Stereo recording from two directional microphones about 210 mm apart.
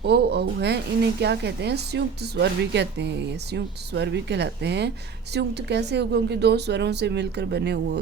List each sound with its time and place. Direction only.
0.0 s speech: 50° right (ahead or behind)